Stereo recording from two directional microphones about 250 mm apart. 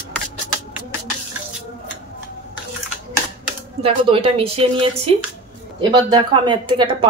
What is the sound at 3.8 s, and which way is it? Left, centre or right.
Speech, right.